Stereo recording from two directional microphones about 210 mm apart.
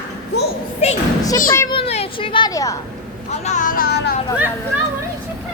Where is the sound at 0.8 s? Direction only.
30° left (ahead or behind).